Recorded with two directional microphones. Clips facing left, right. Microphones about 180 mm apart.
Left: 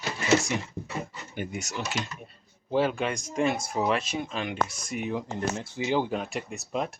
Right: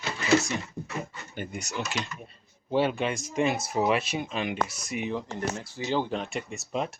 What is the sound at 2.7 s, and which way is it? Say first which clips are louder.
Speech: even; centre (ahead or behind).